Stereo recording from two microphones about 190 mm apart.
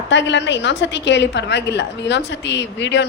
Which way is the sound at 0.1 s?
70° left (ahead or behind).